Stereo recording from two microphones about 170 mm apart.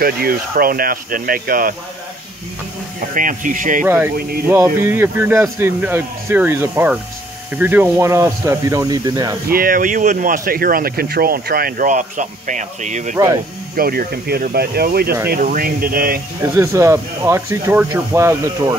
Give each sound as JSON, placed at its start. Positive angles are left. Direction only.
{"t": 0.0, "sound": "speech", "side_deg": -60}
{"t": 3.2, "sound": "speech", "side_deg": -50}
{"t": 3.8, "sound": "speech", "side_deg": -10}
{"t": 9.5, "sound": "speech", "side_deg": -55}
{"t": 13.7, "sound": "speech", "side_deg": -60}
{"t": 16.5, "sound": "speech", "side_deg": -15}